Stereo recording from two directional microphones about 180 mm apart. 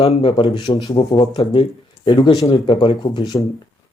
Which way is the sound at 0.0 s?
30° left (ahead or behind).